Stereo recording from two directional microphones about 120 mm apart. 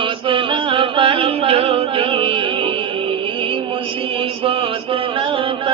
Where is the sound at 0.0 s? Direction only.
50° right (ahead or behind).